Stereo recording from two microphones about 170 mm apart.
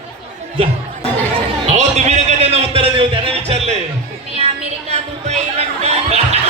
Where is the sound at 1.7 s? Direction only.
40° right (ahead or behind).